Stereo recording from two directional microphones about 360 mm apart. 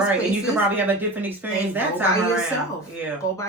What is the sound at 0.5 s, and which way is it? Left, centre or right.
A woman's voice, centre.